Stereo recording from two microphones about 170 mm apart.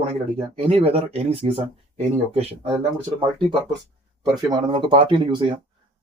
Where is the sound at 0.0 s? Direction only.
35° right (ahead or behind).